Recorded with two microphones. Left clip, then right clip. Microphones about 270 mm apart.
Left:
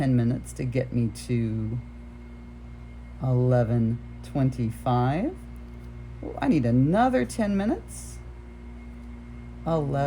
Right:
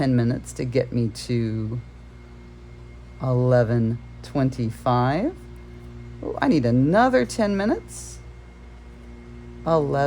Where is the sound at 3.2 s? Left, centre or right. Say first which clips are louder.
Right 5 dB; right.